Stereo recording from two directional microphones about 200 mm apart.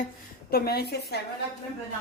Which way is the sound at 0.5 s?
50° left (ahead or behind).